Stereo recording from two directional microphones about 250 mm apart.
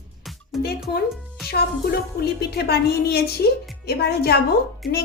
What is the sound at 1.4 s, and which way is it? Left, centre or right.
A woman's voice, left.